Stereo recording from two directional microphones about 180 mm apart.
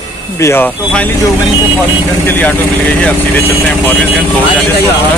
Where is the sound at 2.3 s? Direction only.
10° left (ahead or behind).